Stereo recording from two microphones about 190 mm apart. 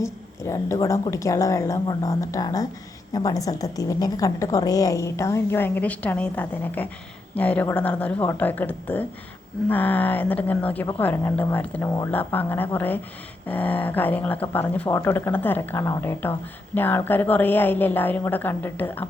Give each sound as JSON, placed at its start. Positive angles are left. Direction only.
{"t": 0.0, "sound": "a woman's voice", "side_deg": 15}